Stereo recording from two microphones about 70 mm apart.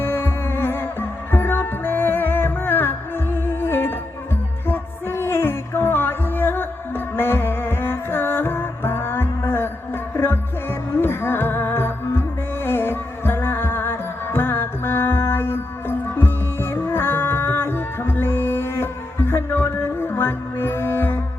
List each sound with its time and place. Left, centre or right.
0.0 s music: left